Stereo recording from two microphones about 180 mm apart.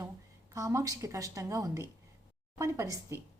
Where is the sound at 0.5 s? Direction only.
15° right (ahead or behind).